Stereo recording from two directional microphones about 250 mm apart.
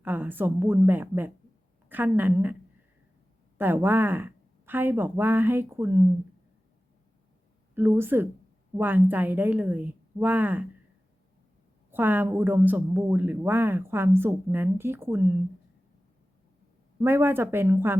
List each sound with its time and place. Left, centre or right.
0.0 s speech: centre
3.6 s speech: centre
7.8 s speech: centre
11.9 s speech: centre
17.0 s speech: centre